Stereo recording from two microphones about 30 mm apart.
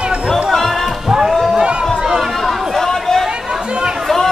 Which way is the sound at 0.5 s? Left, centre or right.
Centre.